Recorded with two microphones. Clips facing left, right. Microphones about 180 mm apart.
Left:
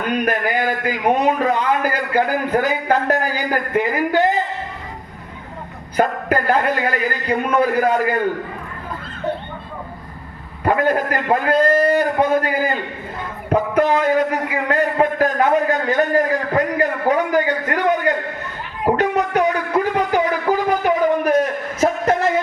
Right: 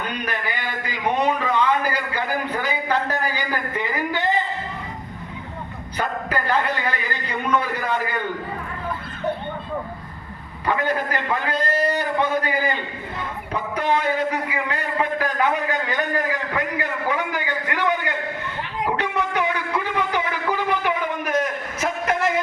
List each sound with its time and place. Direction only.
0.3 s a man's voice: 45° left (ahead or behind)
6.0 s a man's voice: 45° left (ahead or behind)
10.7 s a man's voice: 45° left (ahead or behind)
18.9 s a sound: 40° left (ahead or behind)